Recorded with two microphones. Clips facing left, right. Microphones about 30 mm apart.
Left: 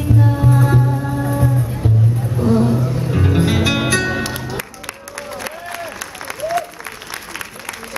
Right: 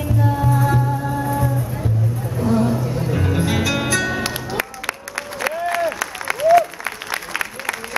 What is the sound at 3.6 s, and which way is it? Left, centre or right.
Music, centre.